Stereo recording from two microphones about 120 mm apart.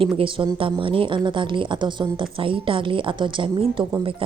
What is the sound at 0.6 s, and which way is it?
Speech, 45° right (ahead or behind).